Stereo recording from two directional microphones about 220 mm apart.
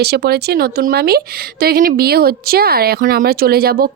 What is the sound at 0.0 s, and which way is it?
Speech, 45° right (ahead or behind).